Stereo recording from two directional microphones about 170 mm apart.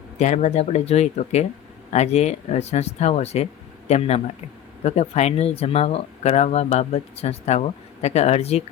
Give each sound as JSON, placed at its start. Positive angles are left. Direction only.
{"t": 0.2, "sound": "speech", "side_deg": 40}